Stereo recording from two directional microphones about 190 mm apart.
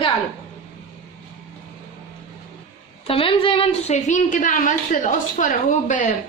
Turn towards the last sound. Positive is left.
turn(degrees=45)  # may be behind; listen again after turning